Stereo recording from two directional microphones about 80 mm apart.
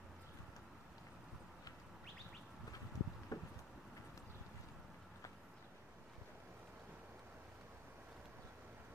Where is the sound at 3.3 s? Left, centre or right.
Left.